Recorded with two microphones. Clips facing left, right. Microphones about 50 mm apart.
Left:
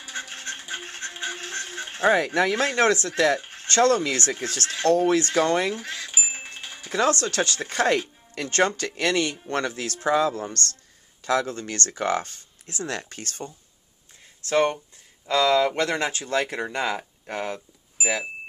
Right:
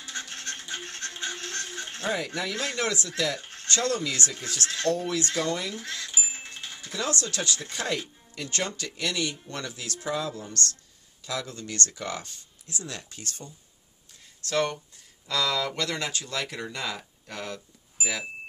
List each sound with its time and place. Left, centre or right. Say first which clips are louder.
0.0 s music: left 3 dB; centre
2.0 s speech: left 10 dB; left
3.3 s a sound: left 5 dB; left
3.6 s speech: left 8 dB; left
5.8 s a sound: left 3 dB; left
6.9 s speech: left 8 dB; left
14.4 s speech: left 5 dB; left